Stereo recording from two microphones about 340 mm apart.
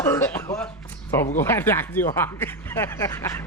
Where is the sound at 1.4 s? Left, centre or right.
Centre.